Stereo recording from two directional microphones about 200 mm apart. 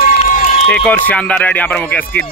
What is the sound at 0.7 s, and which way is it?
Speech, 5° left (ahead or behind).